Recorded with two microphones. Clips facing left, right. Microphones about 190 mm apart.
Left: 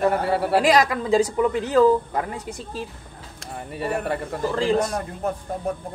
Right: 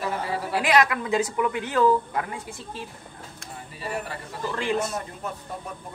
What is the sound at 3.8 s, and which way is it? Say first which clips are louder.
Speech: left 7 dB; 60° left (ahead or behind).